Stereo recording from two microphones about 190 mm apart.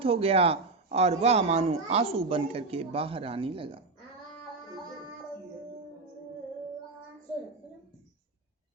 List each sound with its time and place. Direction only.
0.0 s speech: 30° right (ahead or behind)